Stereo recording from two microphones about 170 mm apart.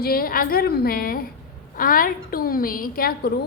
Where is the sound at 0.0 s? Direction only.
60° left (ahead or behind).